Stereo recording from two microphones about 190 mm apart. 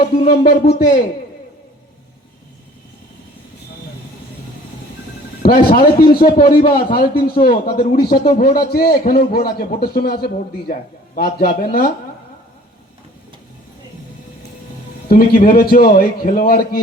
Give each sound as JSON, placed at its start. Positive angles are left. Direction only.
{"t": 0.2, "sound": "a man's voice", "side_deg": 50}
{"t": 5.4, "sound": "a man's voice", "side_deg": 50}
{"t": 15.1, "sound": "a man's voice", "side_deg": 50}